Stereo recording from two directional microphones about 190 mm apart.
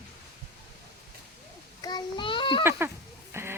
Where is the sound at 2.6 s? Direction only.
10° right (ahead or behind).